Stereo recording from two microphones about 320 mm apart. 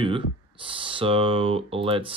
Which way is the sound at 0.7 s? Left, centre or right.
Centre.